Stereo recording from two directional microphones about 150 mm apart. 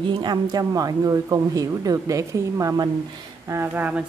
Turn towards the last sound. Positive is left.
turn(degrees=-10)  # may be behind; listen again after turning